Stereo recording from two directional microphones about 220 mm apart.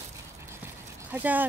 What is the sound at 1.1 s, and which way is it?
Speech, 10° right (ahead or behind).